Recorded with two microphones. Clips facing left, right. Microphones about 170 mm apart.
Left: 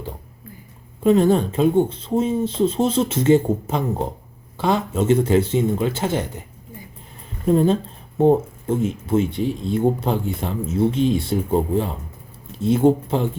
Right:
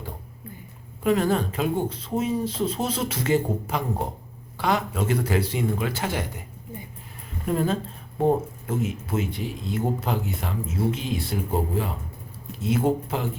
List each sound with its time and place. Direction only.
1.0 s speech: 25° left (ahead or behind)
7.4 s speech: 25° left (ahead or behind)